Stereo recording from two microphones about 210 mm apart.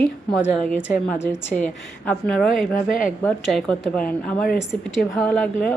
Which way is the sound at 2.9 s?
40° left (ahead or behind).